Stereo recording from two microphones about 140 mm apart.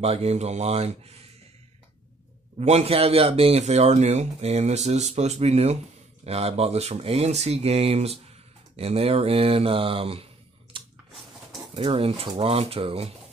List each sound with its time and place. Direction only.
0.0 s speech: 50° right (ahead or behind)
2.6 s speech: 50° right (ahead or behind)
10.7 s chewing: 40° right (ahead or behind)
11.7 s speech: 40° right (ahead or behind)